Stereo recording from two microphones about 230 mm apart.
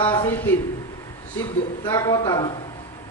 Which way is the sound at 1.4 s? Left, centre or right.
Centre.